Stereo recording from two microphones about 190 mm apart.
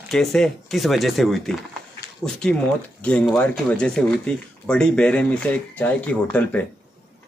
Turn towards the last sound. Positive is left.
turn(degrees=10)  # may be behind; listen again after turning